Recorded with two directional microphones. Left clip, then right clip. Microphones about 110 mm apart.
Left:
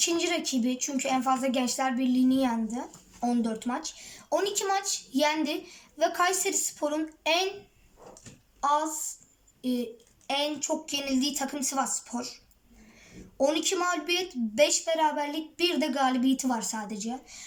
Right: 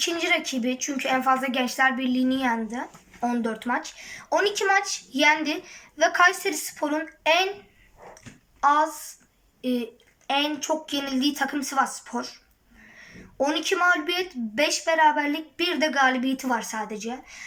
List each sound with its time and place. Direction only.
0.0 s speech: 30° left (ahead or behind)
8.6 s speech: 35° left (ahead or behind)
10.8 s speech: 25° left (ahead or behind)
13.4 s speech: 30° left (ahead or behind)